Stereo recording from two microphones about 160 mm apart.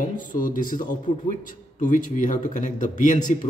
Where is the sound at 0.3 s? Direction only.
60° left (ahead or behind).